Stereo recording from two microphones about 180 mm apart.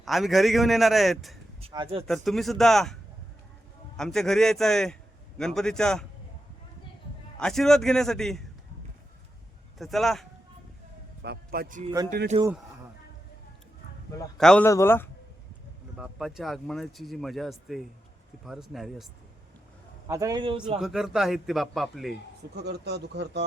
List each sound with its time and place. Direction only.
0.0 s speech: centre (ahead or behind)
1.6 s speech: 30° right (ahead or behind)
2.0 s speech: centre (ahead or behind)
7.3 s speech: 5° left (ahead or behind)
9.7 s speech: centre (ahead or behind)
11.2 s a man's voice: 60° right (ahead or behind)
12.3 s speech: 35° right (ahead or behind)
14.3 s speech: 5° left (ahead or behind)
14.7 s a man's voice: 15° left (ahead or behind)
16.0 s speech: centre (ahead or behind)
20.1 s a man's voice: 20° right (ahead or behind)
20.7 s speech: 5° right (ahead or behind)
22.5 s speech: 65° right (ahead or behind)